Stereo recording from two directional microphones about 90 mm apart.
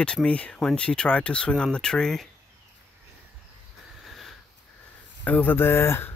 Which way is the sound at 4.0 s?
Centre (ahead or behind).